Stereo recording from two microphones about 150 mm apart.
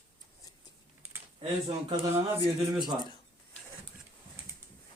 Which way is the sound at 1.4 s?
35° right (ahead or behind).